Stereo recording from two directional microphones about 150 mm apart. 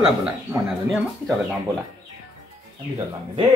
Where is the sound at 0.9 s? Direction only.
Centre (ahead or behind).